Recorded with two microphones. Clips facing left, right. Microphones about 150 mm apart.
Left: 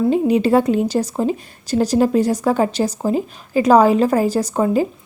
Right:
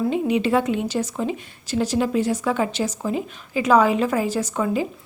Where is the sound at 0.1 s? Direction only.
40° left (ahead or behind).